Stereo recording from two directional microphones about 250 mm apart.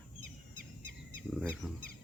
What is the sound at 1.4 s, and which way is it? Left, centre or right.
Speech, centre.